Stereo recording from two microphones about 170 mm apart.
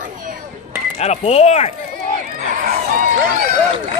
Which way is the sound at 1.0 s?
40° left (ahead or behind).